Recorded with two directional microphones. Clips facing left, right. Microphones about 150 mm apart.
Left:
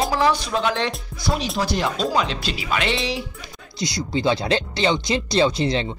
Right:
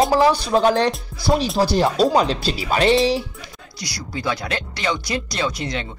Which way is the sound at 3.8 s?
25° left (ahead or behind).